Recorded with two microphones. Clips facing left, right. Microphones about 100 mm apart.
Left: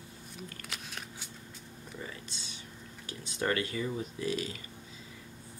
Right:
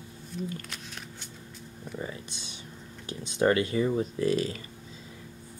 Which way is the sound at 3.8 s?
40° right (ahead or behind).